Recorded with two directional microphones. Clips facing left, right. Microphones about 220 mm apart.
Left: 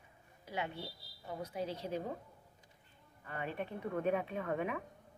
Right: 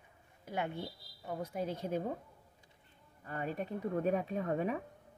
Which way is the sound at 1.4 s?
50° right (ahead or behind).